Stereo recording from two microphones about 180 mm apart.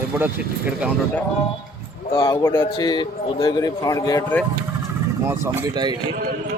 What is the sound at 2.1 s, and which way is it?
Speech, 25° left (ahead or behind).